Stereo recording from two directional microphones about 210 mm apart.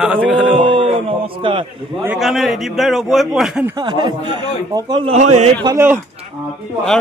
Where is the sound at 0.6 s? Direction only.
25° right (ahead or behind).